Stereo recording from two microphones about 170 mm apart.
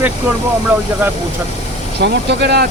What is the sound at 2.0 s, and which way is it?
Speech, 80° right.